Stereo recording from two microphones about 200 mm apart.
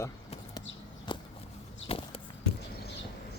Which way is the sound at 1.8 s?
30° left (ahead or behind).